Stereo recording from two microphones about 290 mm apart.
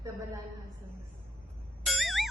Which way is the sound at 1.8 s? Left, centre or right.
Centre.